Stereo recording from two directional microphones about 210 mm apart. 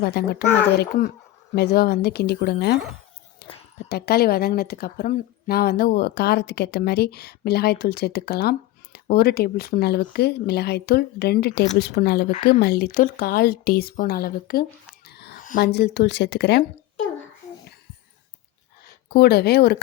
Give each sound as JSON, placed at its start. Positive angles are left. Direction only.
{"t": 0.0, "sound": "a woman's voice", "side_deg": 50}
{"t": 3.8, "sound": "a woman's voice", "side_deg": 50}
{"t": 19.1, "sound": "a woman's voice", "side_deg": 50}